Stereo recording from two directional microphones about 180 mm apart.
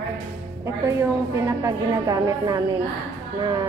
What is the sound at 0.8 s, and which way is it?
A woman's voice, 15° right (ahead or behind).